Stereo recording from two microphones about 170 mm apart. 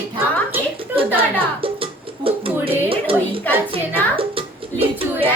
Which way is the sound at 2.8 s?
30° right (ahead or behind).